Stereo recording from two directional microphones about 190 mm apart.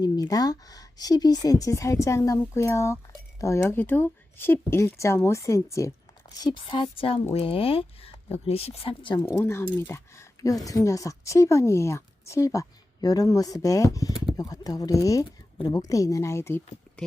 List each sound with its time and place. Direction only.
0.0 s speech: 20° left (ahead or behind)
9.2 s speech: 15° left (ahead or behind)